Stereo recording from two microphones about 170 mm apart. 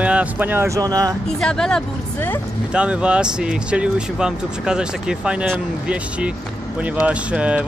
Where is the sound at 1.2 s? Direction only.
5° left (ahead or behind).